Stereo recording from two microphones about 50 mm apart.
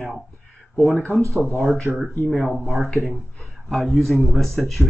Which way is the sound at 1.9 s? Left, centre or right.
Right.